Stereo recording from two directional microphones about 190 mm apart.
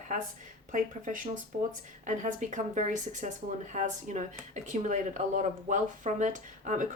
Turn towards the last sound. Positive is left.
turn(degrees=-40)  # may be behind; listen again after turning